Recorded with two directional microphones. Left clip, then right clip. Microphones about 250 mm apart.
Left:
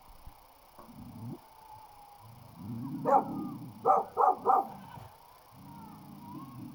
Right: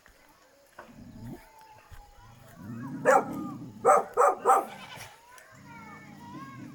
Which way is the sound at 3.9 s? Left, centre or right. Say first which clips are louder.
Right 3 dB; right.